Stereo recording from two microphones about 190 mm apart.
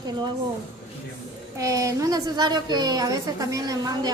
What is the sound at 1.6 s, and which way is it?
A woman's voice, 15° right (ahead or behind).